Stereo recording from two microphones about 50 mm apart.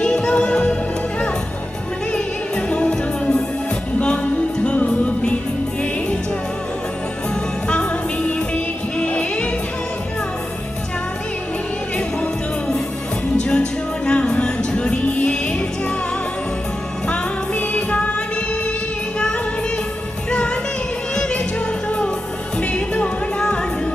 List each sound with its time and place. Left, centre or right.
0.0 s music: centre
2.1 s music: left
7.7 s music: left
11.9 s music: centre
17.1 s music: left
20.3 s music: left